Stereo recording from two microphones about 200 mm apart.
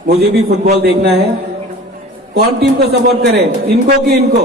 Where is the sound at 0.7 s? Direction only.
50° right (ahead or behind).